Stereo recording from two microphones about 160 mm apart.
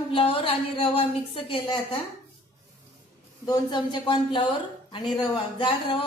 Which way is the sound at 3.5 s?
30° left (ahead or behind).